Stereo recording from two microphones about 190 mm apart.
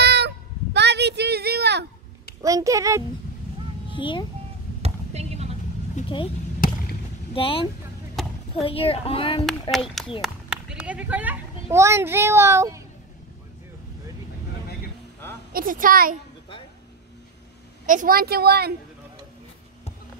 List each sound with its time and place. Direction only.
0.0 s a sound: 60° right (ahead or behind)
2.4 s speech: 15° right (ahead or behind)
3.9 s a child's voice: 25° left (ahead or behind)
4.8 s a sound: 35° right (ahead or behind)
6.0 s speech: 25° left (ahead or behind)
7.3 s speech: 30° left (ahead or behind)
8.2 s a sound: centre (ahead or behind)
8.6 s speech: 30° left (ahead or behind)
10.2 s a child's voice: 5° right (ahead or behind)
15.5 s a woman's voice: 45° right (ahead or behind)
17.8 s a woman's voice: 45° right (ahead or behind)